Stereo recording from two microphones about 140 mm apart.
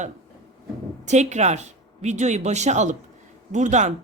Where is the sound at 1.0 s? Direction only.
55° right (ahead or behind).